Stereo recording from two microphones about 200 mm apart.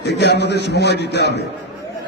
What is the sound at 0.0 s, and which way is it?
A man's voice, 55° left (ahead or behind).